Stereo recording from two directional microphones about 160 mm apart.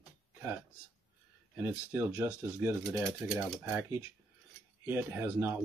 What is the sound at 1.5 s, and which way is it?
Speech, 10° right (ahead or behind).